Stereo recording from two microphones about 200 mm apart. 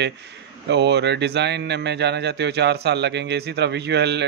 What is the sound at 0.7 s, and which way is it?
Speech, 60° right (ahead or behind).